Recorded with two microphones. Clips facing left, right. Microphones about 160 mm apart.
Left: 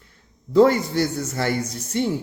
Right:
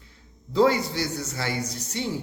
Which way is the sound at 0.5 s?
50° left (ahead or behind).